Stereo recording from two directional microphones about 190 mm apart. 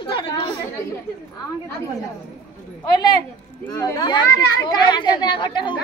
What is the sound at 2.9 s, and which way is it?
Speech, 20° left (ahead or behind).